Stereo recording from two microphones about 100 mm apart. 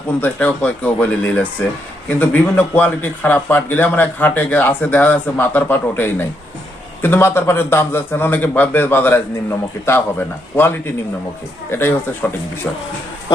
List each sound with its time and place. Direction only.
0.2 s speech: 15° left (ahead or behind)